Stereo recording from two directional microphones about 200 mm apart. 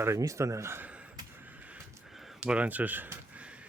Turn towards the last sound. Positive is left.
turn(degrees=-5)  # may be behind; listen again after turning